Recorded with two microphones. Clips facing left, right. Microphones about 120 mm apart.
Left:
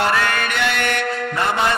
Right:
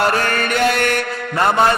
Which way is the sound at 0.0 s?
40° right (ahead or behind).